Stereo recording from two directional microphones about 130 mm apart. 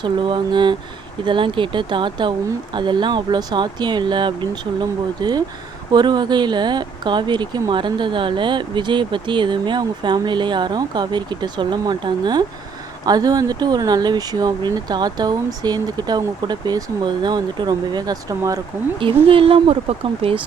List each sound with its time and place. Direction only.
0.0 s speech: 40° right (ahead or behind)
19.3 s speech: 45° right (ahead or behind)